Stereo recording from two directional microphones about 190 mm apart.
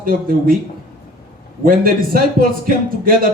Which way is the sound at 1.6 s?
50° right (ahead or behind).